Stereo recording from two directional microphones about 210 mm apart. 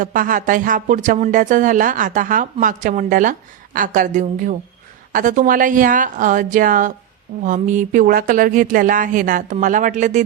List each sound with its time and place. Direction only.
0.0 s a woman's voice: 40° right (ahead or behind)